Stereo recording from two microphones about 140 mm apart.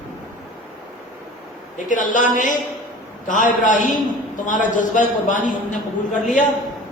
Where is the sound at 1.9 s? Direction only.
65° left (ahead or behind).